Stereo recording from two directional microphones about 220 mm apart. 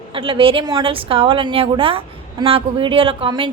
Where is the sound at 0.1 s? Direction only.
25° right (ahead or behind).